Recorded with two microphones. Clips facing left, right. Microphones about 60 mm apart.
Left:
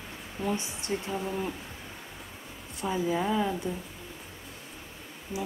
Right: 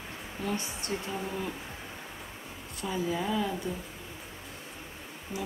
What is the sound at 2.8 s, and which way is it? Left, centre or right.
Speech, centre.